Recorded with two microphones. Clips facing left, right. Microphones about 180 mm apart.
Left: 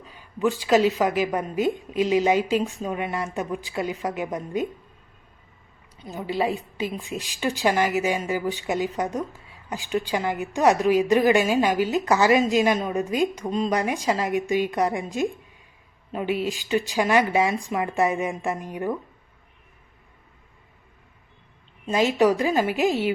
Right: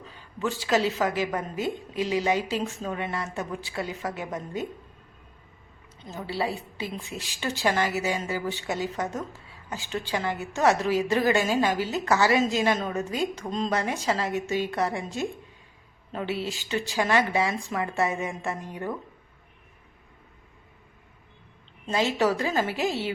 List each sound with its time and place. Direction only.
0.3 s a woman's voice: 15° left (ahead or behind)
6.0 s a woman's voice: 15° left (ahead or behind)
21.8 s a woman's voice: 15° left (ahead or behind)